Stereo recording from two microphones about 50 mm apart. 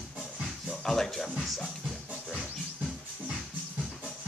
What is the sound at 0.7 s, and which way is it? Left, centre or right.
Speech, centre.